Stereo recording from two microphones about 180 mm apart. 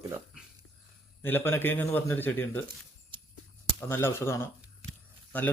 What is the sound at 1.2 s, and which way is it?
Speech, 10° left (ahead or behind).